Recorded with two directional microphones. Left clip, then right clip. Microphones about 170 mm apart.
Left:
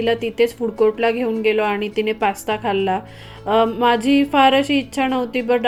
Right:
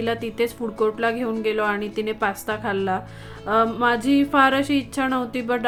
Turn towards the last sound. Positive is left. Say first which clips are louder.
# left 5 dB
turn(degrees=0)  # may be behind; listen again after turning